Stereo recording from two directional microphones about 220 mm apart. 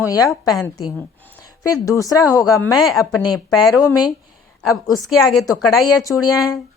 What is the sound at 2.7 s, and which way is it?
Speech, centre (ahead or behind).